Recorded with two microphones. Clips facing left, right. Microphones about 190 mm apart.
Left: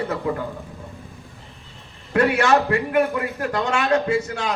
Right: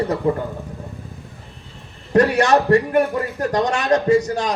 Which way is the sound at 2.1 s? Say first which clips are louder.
Right 3 dB; 40° right (ahead or behind).